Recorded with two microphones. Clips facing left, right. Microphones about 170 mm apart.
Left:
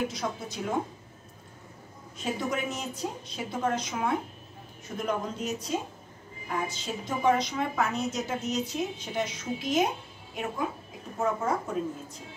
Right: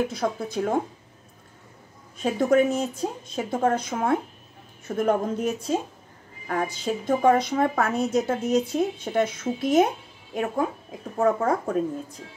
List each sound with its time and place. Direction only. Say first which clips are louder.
0.1 s a woman's voice: right 7 dB; 55° right (ahead or behind)
2.3 s a woman's voice: right 13 dB; 50° right (ahead or behind)